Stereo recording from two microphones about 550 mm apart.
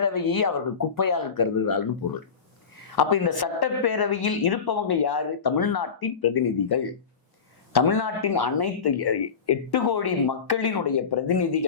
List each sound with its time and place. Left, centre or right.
0.0 s a woman's voice: left
2.8 s a woman's voice: left